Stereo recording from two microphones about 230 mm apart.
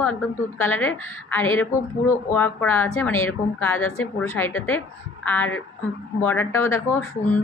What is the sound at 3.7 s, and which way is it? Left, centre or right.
Speech, left.